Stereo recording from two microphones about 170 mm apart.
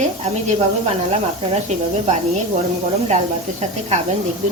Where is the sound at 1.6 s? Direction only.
40° right (ahead or behind).